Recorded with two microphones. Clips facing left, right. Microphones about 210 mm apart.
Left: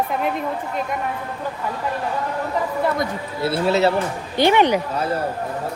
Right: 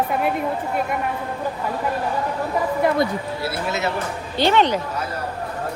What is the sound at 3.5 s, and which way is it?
Speech, 30° left (ahead or behind).